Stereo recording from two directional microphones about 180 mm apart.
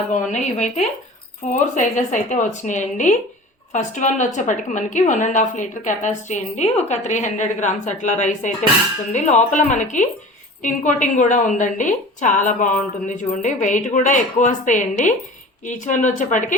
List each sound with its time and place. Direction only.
0.1 s a woman's voice: 40° left (ahead or behind)